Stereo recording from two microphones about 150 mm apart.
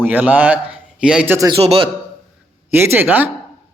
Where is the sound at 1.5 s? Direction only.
35° right (ahead or behind).